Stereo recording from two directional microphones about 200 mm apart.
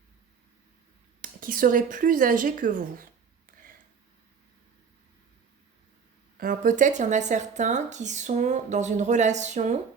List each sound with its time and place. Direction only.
1.2 s speech: 45° right (ahead or behind)
6.3 s speech: 45° right (ahead or behind)